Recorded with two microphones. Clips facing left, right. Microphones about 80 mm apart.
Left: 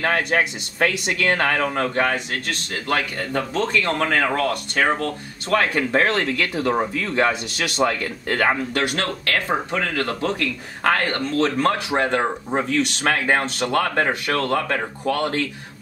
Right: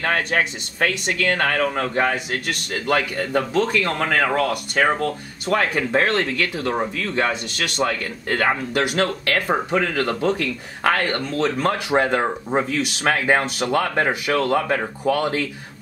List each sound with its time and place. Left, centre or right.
0.0 s speech: centre
3.3 s speech: centre
4.9 s speech: centre
5.7 s speech: centre
8.9 s speech: right
11.1 s speech: centre